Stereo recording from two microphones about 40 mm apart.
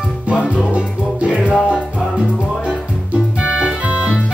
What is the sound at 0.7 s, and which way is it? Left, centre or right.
Music, right.